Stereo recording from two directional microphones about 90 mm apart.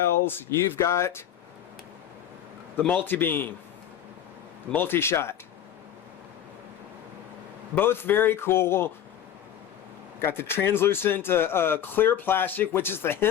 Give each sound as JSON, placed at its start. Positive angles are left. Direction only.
{"t": 0.3, "sound": "speech", "side_deg": 30}
{"t": 2.7, "sound": "speech", "side_deg": 20}
{"t": 4.7, "sound": "speech", "side_deg": 25}
{"t": 7.8, "sound": "speech", "side_deg": 25}
{"t": 10.2, "sound": "speech", "side_deg": 25}